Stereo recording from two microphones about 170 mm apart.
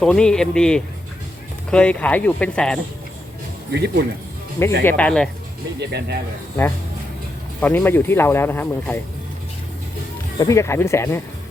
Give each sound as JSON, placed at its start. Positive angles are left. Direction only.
{"t": 0.0, "sound": "a man's voice", "side_deg": 5}
{"t": 3.7, "sound": "speech", "side_deg": -80}
{"t": 4.6, "sound": "speech", "side_deg": 15}
{"t": 5.8, "sound": "speech", "side_deg": -75}
{"t": 7.6, "sound": "speech", "side_deg": 10}
{"t": 10.3, "sound": "speech", "side_deg": 20}